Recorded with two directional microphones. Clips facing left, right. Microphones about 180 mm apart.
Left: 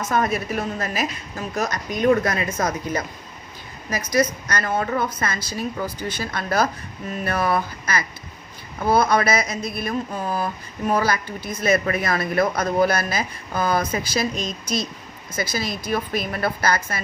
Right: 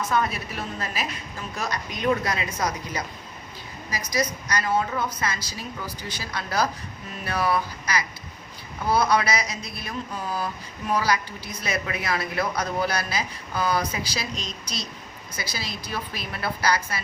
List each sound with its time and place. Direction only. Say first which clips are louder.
0.0 s speech: left 3 dB; 45° left (ahead or behind)